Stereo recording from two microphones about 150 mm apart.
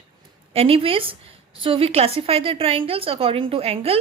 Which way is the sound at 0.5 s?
40° right (ahead or behind).